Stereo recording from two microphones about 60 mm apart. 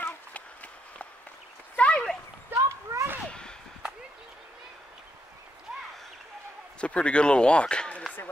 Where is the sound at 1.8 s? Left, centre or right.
Centre.